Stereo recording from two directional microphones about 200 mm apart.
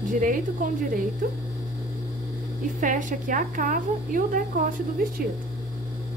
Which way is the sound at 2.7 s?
40° right (ahead or behind).